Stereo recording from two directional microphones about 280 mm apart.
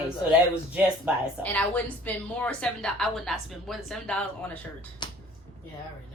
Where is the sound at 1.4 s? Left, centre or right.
Centre.